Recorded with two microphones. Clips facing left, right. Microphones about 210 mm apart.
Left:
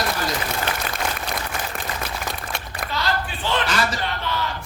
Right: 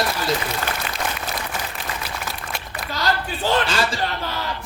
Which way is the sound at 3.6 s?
30° right (ahead or behind).